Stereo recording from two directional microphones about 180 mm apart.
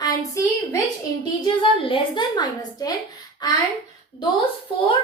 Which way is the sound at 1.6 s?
30° left (ahead or behind).